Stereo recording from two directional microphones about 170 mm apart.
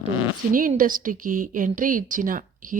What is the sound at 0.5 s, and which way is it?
Speech, 50° right (ahead or behind).